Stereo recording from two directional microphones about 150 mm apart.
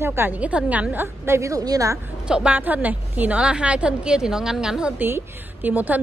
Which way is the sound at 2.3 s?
10° right (ahead or behind).